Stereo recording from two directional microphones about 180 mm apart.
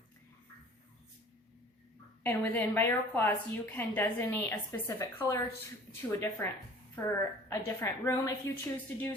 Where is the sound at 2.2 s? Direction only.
10° left (ahead or behind).